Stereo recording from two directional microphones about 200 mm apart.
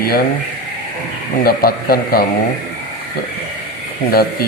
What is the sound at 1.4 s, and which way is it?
Speech, 50° left (ahead or behind).